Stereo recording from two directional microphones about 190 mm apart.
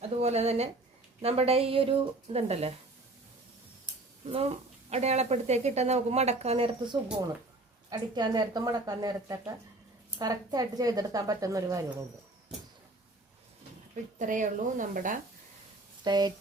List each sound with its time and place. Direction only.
0.0 s a woman's voice: 35° right (ahead or behind)
4.3 s a woman's voice: 30° right (ahead or behind)
14.2 s a woman's voice: 40° right (ahead or behind)
16.0 s speech: 20° right (ahead or behind)